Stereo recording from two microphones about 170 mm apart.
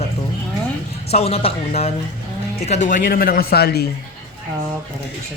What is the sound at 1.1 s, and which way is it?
Speech, 35° left (ahead or behind).